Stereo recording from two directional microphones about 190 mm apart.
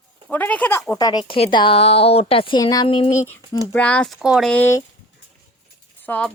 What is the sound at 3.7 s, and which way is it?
Speech, 5° left (ahead or behind).